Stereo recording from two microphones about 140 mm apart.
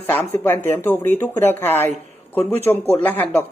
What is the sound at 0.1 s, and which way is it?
Speech, 15° left (ahead or behind).